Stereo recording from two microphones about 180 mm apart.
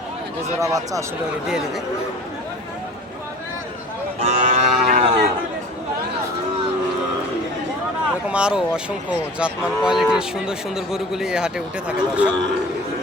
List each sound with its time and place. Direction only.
0.6 s speech: 20° right (ahead or behind)
4.2 s cattle: 35° right (ahead or behind)
8.3 s speech: 5° right (ahead or behind)